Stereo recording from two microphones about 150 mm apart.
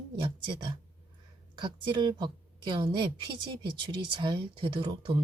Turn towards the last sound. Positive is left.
turn(degrees=-35)  # may be behind; listen again after turning